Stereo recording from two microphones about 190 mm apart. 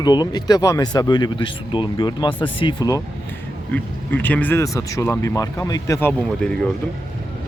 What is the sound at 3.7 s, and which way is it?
Speech, 10° left (ahead or behind).